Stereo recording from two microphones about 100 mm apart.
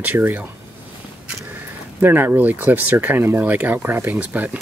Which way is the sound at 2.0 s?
20° right (ahead or behind).